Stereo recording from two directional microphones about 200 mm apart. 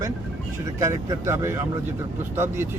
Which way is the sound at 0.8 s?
15° right (ahead or behind).